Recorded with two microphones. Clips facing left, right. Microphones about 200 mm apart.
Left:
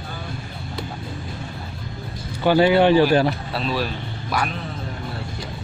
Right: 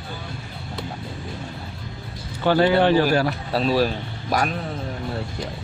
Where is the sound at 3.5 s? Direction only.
40° right (ahead or behind).